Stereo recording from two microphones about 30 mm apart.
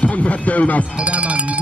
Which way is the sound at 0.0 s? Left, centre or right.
Left.